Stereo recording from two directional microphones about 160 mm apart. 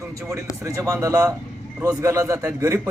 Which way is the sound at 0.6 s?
20° right (ahead or behind).